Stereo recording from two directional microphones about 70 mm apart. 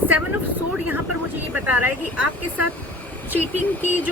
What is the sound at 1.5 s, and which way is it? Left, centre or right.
Speech, right.